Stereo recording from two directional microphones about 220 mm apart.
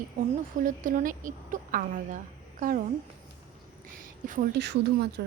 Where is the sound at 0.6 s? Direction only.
35° right (ahead or behind).